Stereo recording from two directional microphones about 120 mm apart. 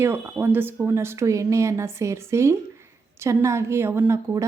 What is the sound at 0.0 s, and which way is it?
A woman's voice, 20° right (ahead or behind).